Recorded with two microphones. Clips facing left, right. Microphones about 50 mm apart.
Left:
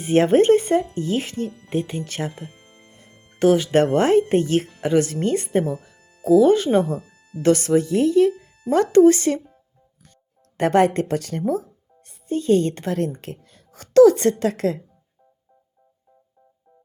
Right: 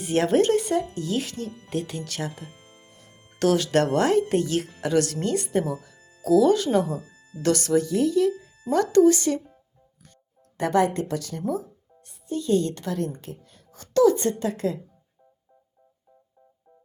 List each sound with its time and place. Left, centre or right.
0.0 s speech: left
2.5 s music: centre
2.8 s music: left
3.3 s speech: centre
4.8 s speech: left
6.9 s music: left
7.4 s speech: left
10.6 s a woman's voice: left